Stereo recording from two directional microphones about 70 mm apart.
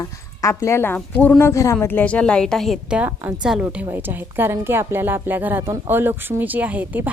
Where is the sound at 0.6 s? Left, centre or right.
Left.